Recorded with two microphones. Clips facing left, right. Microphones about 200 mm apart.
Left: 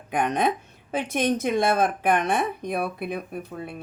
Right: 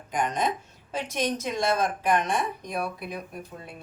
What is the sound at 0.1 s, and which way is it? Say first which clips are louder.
Speech: left 4 dB; 60° left (ahead or behind).